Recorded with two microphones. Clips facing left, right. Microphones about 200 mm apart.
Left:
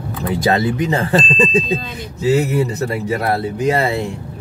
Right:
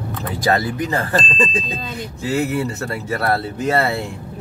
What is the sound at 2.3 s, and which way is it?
Speech, 20° left (ahead or behind).